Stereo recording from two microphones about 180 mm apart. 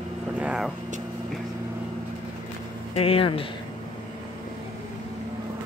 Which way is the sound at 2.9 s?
35° left (ahead or behind).